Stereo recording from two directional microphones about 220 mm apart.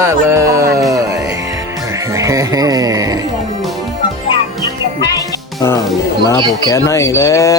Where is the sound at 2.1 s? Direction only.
15° right (ahead or behind).